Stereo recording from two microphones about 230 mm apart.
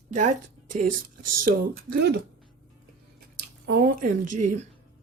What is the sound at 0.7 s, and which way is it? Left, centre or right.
Speech, right.